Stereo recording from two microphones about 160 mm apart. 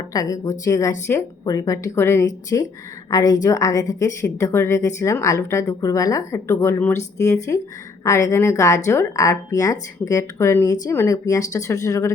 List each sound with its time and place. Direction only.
0.1 s a woman's voice: 20° left (ahead or behind)